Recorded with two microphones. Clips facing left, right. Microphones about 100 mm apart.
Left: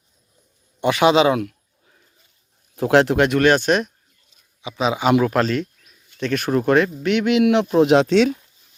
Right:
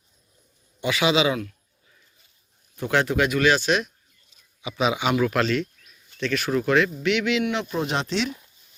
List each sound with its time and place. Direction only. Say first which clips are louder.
0.8 s speech: left 6 dB; 55° left (ahead or behind)
2.7 s speech: left 7 dB; 90° left; by 3.9 s 50° left (ahead or behind)
4.8 s speech: left 4 dB; 35° left (ahead or behind)
7.4 s speech: left 11 dB; 65° left (ahead or behind)